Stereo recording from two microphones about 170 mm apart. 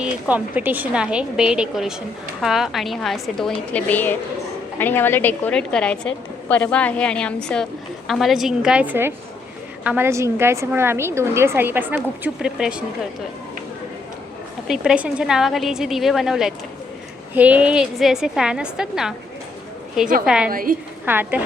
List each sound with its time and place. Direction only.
0.0 s a woman's voice: 10° right (ahead or behind)
14.7 s a woman's voice: 5° right (ahead or behind)
20.2 s a woman's voice: 5° right (ahead or behind)
20.5 s a woman's voice: 55° right (ahead or behind)
21.0 s a woman's voice: 10° right (ahead or behind)